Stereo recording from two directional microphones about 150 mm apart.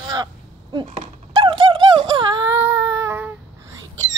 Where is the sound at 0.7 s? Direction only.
35° right (ahead or behind); by 3.3 s 15° right (ahead or behind).